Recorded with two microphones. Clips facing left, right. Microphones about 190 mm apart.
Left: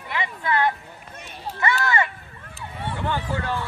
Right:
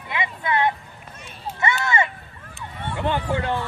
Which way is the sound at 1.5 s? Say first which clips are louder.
Even; 20° right (ahead or behind).